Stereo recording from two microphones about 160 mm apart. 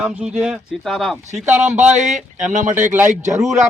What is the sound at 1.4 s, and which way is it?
Speech, 10° right (ahead or behind).